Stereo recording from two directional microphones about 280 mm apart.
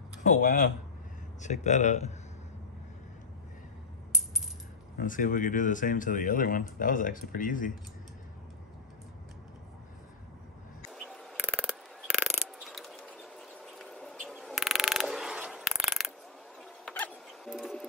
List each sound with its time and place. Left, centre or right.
0.2 s speech: left
4.9 s speech: left
10.9 s mechanisms: centre
16.8 s bird: centre